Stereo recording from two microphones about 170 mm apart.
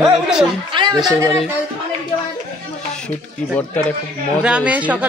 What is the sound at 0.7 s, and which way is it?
Speech, 25° right (ahead or behind).